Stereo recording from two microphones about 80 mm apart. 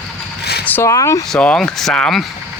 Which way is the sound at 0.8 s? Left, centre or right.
Left.